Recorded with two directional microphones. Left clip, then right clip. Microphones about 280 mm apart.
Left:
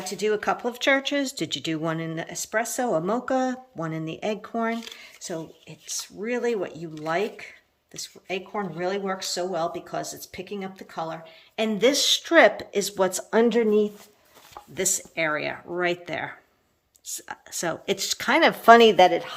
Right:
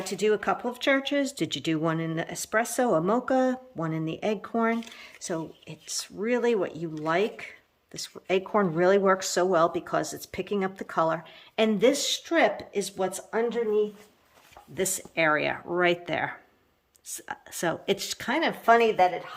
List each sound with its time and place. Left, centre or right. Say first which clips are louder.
0.0 s speech: even; centre
13.4 s speech: left 5 dB; left
14.8 s speech: even; centre
18.6 s speech: left 6 dB; left